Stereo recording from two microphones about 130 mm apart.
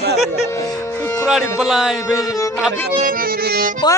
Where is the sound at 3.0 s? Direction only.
90° right.